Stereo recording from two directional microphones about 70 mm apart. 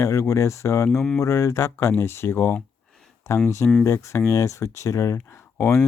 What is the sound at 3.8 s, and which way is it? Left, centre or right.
Speech, left.